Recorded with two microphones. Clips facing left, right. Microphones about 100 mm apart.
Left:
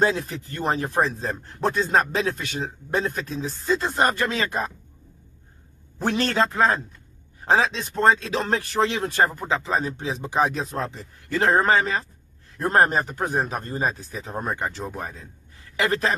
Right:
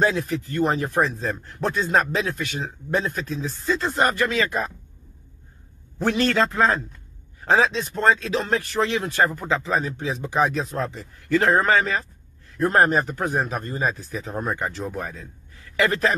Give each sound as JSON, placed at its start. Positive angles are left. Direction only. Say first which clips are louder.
{"t": 0.0, "sound": "speech", "louder": "right 1 dB", "side_deg": 30}
{"t": 6.0, "sound": "speech", "louder": "right 1 dB", "side_deg": 30}